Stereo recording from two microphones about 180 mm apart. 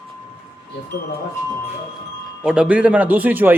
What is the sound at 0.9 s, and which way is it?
Speech, 65° left (ahead or behind).